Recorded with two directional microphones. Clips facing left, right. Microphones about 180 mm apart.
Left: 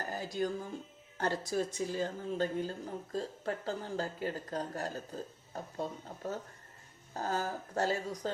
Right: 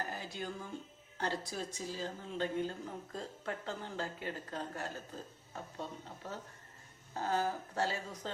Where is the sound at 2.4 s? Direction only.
35° left (ahead or behind).